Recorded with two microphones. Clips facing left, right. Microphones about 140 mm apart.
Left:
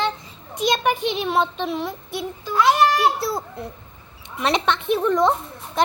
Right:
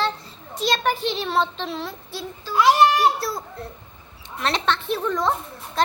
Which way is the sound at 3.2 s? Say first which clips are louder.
Left 3 dB; 25° left (ahead or behind).